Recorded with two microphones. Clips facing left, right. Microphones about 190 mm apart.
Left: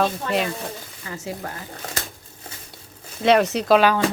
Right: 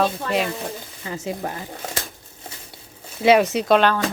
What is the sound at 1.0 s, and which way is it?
Speech, 20° right (ahead or behind).